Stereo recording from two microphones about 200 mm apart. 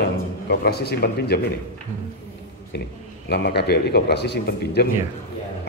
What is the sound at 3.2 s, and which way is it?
A man's voice, 55° left (ahead or behind).